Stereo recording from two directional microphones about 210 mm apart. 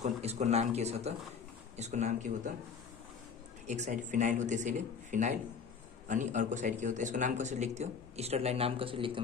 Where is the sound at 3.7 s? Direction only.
35° right (ahead or behind).